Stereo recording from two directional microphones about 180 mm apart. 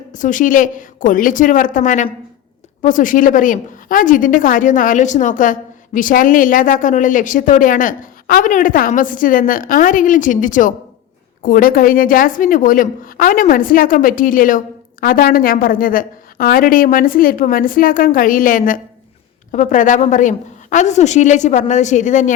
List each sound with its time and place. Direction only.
0.1 s a woman's voice: 45° left (ahead or behind)